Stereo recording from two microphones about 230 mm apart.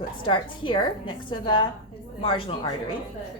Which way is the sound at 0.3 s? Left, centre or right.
Left.